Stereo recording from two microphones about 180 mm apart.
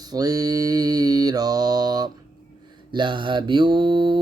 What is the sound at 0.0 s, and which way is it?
Mantra, 20° right (ahead or behind).